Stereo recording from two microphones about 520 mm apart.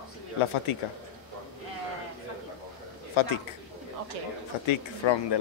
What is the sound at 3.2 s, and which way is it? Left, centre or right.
Speech, left.